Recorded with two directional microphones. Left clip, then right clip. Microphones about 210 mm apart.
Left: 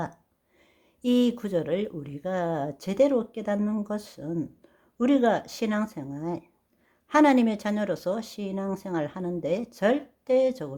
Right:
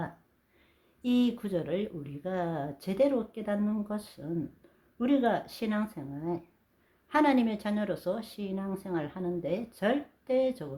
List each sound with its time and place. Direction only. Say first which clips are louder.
1.0 s speech: left 5 dB; 40° left (ahead or behind)